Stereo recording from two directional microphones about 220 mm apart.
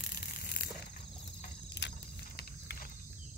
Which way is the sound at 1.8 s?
50° left (ahead or behind).